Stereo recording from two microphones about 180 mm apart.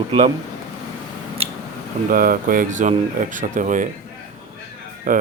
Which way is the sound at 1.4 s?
35° right (ahead or behind).